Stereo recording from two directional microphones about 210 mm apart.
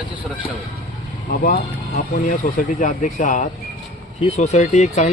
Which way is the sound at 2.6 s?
40° left (ahead or behind).